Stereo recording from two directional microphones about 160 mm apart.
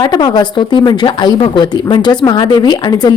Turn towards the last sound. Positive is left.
turn(degrees=25)  # may be behind; listen again after turning